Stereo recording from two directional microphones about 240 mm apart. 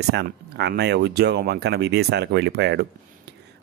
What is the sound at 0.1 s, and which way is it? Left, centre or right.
Speech, right.